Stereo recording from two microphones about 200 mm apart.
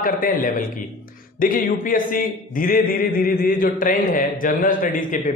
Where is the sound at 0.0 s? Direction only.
45° left (ahead or behind).